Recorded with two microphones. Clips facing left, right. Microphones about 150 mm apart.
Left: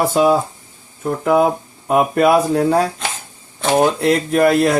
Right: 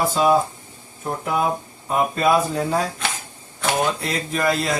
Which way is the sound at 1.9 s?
70° left (ahead or behind).